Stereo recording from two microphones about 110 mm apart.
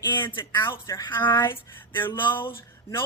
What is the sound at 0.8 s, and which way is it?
Speech, 35° left (ahead or behind).